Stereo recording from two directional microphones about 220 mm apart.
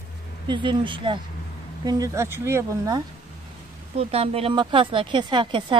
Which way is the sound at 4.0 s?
25° right (ahead or behind).